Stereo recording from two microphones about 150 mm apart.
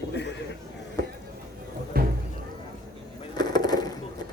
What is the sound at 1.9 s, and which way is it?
Music, 90° right.